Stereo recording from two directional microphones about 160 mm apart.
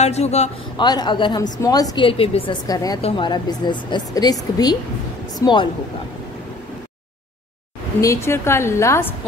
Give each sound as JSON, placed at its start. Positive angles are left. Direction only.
{"t": 0.0, "sound": "a man's voice", "side_deg": 45}
{"t": 0.7, "sound": "a woman's voice", "side_deg": 25}
{"t": 2.0, "sound": "a woman's voice", "side_deg": 35}
{"t": 2.6, "sound": "a woman's voice", "side_deg": 25}
{"t": 3.0, "sound": "a woman's voice", "side_deg": 35}
{"t": 8.0, "sound": "a woman's voice", "side_deg": 15}